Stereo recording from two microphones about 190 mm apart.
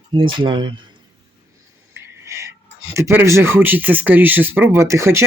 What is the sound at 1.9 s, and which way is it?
Speech, 15° right (ahead or behind).